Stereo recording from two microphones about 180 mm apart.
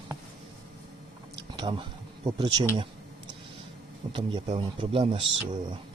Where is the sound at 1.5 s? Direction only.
25° right (ahead or behind).